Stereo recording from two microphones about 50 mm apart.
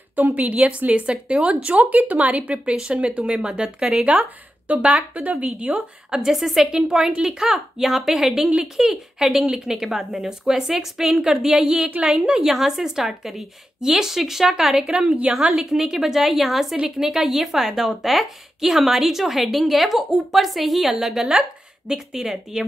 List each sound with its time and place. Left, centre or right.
0.1 s speech: right
6.0 s a woman's voice: centre
15.0 s speech: right
15.5 s a woman's voice: centre